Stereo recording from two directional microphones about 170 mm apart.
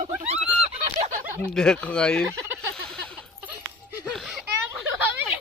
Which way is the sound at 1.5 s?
5° left (ahead or behind).